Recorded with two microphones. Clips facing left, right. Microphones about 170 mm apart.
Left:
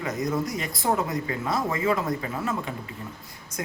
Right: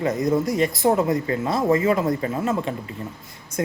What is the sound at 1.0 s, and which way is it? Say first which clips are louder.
Speech: right 7 dB; 40° right (ahead or behind).